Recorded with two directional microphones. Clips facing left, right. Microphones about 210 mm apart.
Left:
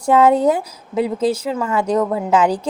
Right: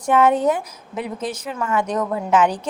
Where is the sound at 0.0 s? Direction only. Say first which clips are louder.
Left 3 dB; 30° left (ahead or behind).